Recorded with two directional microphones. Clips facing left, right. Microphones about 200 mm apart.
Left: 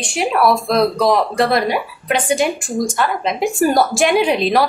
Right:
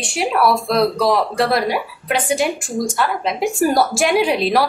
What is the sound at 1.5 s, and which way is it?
A woman's voice, 5° right (ahead or behind).